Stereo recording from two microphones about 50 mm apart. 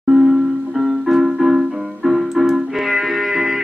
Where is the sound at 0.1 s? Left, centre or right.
Centre.